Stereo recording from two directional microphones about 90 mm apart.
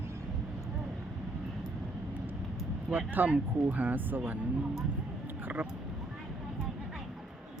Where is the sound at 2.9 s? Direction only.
20° right (ahead or behind).